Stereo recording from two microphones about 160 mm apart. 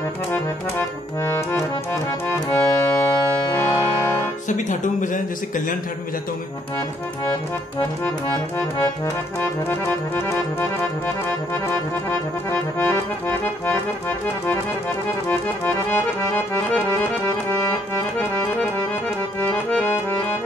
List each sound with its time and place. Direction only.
0.3 s accordion: 15° left (ahead or behind)
2.2 s music: 20° left (ahead or behind)
4.5 s speech: 50° left (ahead or behind)
9.4 s accordion: 15° left (ahead or behind)
12.1 s accordion: 15° left (ahead or behind)
15.2 s accordion: 15° left (ahead or behind)
19.5 s accordion: 15° left (ahead or behind)